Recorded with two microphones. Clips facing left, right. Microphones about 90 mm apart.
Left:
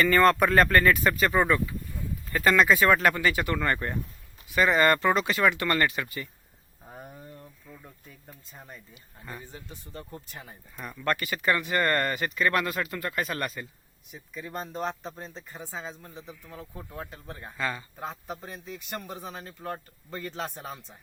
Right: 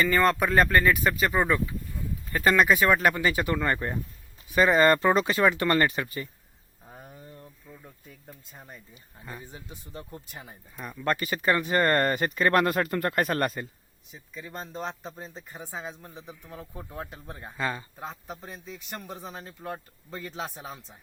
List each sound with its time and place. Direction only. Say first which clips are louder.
0.0 s a man's voice: left 2 dB; 5° right (ahead or behind); by 6.2 s 30° right (ahead or behind)
6.8 s a sound: left 2 dB; 10° left (ahead or behind)
7.7 s a man's voice: even; 5° right (ahead or behind)
9.4 s speech: even; 15° right (ahead or behind)
11.0 s speech: right 1 dB; 25° right (ahead or behind); by 13.7 s 40° right (ahead or behind)
14.1 s a man's voice: left 3 dB; centre (ahead or behind)
15.5 s speech: right 1 dB; 15° right (ahead or behind)
17.6 s speech: right 1 dB; 25° right (ahead or behind)
17.9 s a man's voice: left 2 dB; centre (ahead or behind)